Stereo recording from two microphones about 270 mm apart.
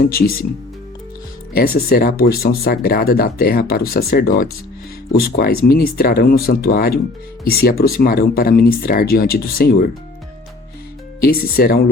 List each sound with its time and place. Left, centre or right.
0.0 s speech: left
1.5 s speech: left
11.2 s speech: left